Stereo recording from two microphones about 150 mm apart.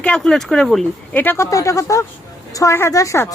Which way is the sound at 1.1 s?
15° left (ahead or behind).